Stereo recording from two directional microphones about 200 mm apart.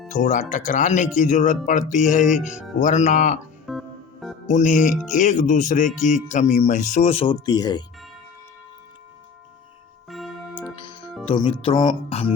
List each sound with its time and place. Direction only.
0.1 s speech: 40° left (ahead or behind)
3.7 s organ: centre (ahead or behind)
4.4 s speech: 35° left (ahead or behind); by 7.9 s 20° left (ahead or behind)
10.1 s music: centre (ahead or behind)
11.3 s speech: 25° left (ahead or behind)